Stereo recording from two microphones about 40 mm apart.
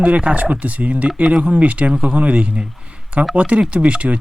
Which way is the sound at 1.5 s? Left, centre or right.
Right.